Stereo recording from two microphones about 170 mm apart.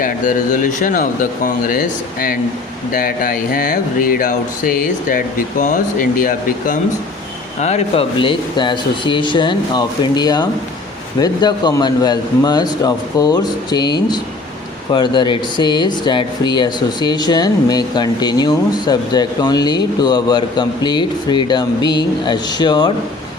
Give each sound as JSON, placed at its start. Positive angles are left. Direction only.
{"t": 0.0, "sound": "speech", "side_deg": 50}
{"t": 7.6, "sound": "speech", "side_deg": 35}